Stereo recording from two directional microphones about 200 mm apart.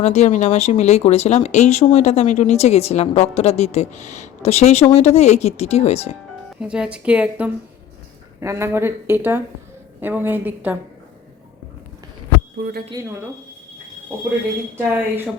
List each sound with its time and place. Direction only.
0.0 s speech: 35° left (ahead or behind)
6.6 s speech: 5° right (ahead or behind)
12.6 s speech: 55° right (ahead or behind)
14.8 s speech: 10° right (ahead or behind)